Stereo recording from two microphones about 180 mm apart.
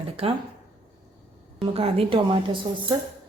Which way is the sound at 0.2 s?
30° right (ahead or behind).